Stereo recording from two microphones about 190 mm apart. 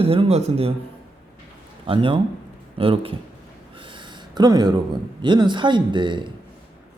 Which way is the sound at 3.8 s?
25° right (ahead or behind).